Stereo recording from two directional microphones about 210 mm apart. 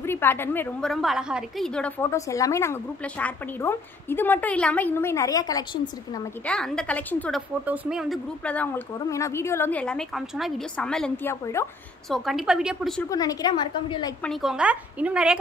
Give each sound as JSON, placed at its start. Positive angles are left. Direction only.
{"t": 0.0, "sound": "a woman's voice", "side_deg": 10}
{"t": 6.4, "sound": "a woman's voice", "side_deg": 5}
{"t": 12.1, "sound": "a woman's voice", "side_deg": 0}
{"t": 13.1, "sound": "a woman's voice", "side_deg": 15}
{"t": 14.2, "sound": "a woman's voice", "side_deg": 0}